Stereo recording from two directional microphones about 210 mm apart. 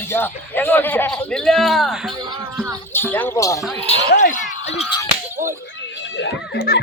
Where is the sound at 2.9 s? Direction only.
10° left (ahead or behind).